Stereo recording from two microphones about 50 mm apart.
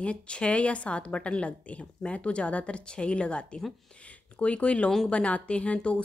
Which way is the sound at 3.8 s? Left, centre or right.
Left.